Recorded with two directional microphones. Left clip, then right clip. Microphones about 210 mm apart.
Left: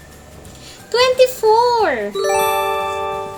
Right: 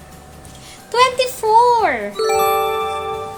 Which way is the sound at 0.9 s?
10° right (ahead or behind).